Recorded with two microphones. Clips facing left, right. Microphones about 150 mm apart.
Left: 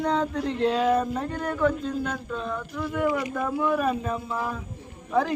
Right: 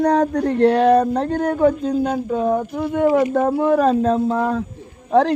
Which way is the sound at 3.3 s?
55° right (ahead or behind).